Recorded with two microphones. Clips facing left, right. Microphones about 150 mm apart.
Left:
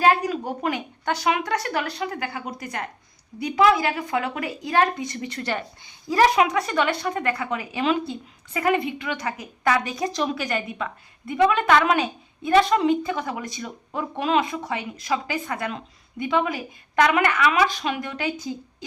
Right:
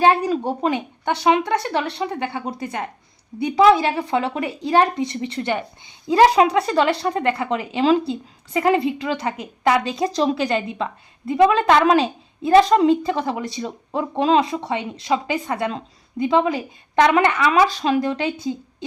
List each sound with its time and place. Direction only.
0.0 s a woman's voice: 30° right (ahead or behind)